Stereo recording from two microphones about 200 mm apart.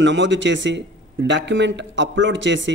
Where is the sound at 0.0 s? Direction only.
60° right (ahead or behind).